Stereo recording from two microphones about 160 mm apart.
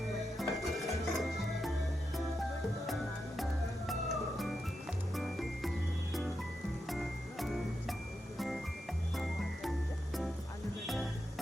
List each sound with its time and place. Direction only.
0.3 s music: centre (ahead or behind)
2.8 s music: centre (ahead or behind)
6.8 s music: centre (ahead or behind)
9.1 s frog: centre (ahead or behind)
10.8 s music: centre (ahead or behind)